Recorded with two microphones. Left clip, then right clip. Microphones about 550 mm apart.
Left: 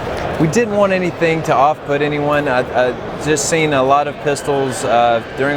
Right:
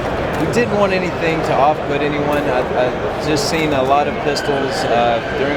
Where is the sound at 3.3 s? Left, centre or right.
Left.